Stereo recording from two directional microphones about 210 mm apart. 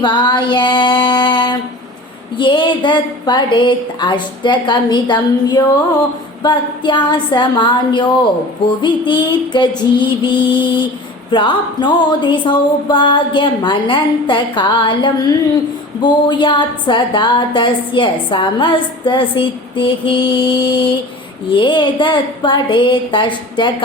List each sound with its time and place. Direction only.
0.0 s female singing: 20° left (ahead or behind)
2.4 s a woman's voice: 25° left (ahead or behind)
21.5 s a woman's voice: 20° left (ahead or behind)